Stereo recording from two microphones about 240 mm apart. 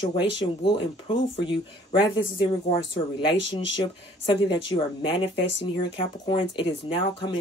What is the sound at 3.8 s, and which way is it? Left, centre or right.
Speech, centre.